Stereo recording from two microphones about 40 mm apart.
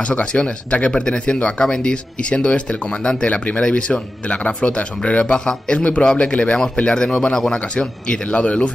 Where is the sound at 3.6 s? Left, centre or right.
Left.